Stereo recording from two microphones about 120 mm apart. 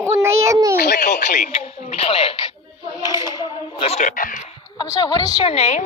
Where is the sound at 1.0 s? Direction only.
90° left.